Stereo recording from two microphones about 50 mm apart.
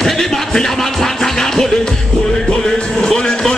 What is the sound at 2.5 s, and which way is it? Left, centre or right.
Music, centre.